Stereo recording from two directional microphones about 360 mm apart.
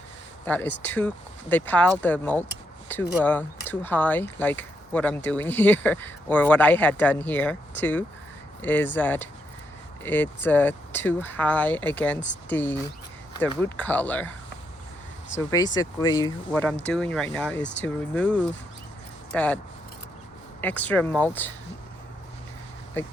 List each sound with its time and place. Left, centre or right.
0.4 s speech: centre
15.4 s speech: centre
17.6 s speech: left
17.8 s speech: centre
20.6 s speech: centre
23.0 s speech: centre